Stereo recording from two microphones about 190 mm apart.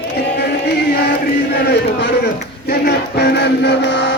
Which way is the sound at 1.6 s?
60° left (ahead or behind).